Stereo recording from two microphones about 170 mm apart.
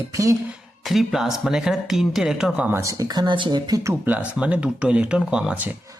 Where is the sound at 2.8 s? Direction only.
20° right (ahead or behind).